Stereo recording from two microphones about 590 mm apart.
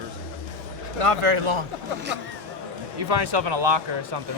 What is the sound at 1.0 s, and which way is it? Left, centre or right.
Speech, right.